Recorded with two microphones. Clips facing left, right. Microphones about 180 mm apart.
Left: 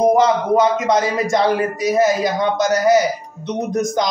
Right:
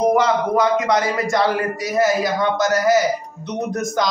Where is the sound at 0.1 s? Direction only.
20° left (ahead or behind).